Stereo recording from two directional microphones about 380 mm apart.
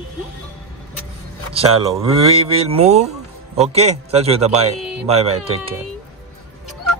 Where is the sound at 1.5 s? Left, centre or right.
Centre.